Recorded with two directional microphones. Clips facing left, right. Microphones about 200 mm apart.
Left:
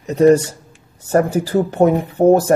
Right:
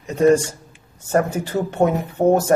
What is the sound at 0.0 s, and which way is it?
Speech, 35° left (ahead or behind).